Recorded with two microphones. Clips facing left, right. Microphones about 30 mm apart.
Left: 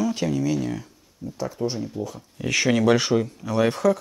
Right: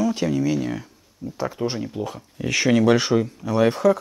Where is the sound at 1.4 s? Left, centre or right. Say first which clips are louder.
Right 2 dB; right.